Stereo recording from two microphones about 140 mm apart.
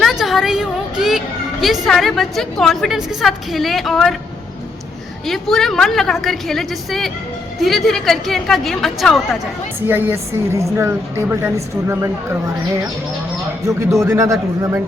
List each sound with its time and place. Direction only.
0.0 s a woman's voice: centre (ahead or behind)
5.2 s a woman's voice: centre (ahead or behind)
9.8 s a woman's voice: 15° right (ahead or behind)
14.0 s a man's voice: 20° right (ahead or behind)